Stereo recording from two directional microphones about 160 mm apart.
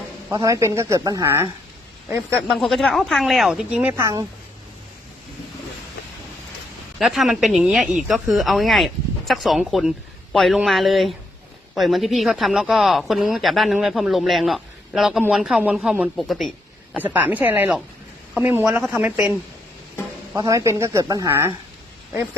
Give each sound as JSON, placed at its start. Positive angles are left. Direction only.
{"t": 0.3, "sound": "speech", "side_deg": -20}
{"t": 2.5, "sound": "speech", "side_deg": 0}
{"t": 7.0, "sound": "speech", "side_deg": 0}
{"t": 16.9, "sound": "speech", "side_deg": -10}
{"t": 20.3, "sound": "speech", "side_deg": -20}